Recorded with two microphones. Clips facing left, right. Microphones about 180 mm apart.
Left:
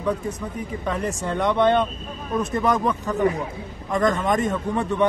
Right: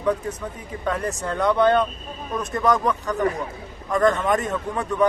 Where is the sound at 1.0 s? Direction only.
Centre (ahead or behind).